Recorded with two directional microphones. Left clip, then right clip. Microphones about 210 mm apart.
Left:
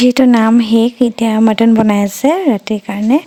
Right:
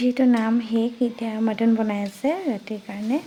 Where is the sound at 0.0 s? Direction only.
45° left (ahead or behind).